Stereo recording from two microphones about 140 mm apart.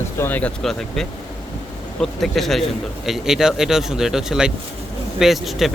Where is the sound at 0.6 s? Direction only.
5° left (ahead or behind).